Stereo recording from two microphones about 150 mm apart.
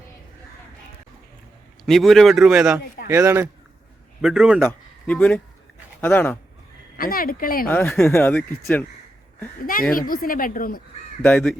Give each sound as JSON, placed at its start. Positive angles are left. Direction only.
{"t": 1.8, "sound": "a man's voice", "side_deg": 0}
{"t": 3.1, "sound": "speech", "side_deg": -20}
{"t": 4.2, "sound": "a man's voice", "side_deg": -5}
{"t": 5.0, "sound": "speech", "side_deg": 10}
{"t": 6.9, "sound": "speech", "side_deg": 70}
{"t": 7.7, "sound": "speech", "side_deg": 15}
{"t": 10.1, "sound": "speech", "side_deg": 70}
{"t": 11.2, "sound": "speech", "side_deg": 10}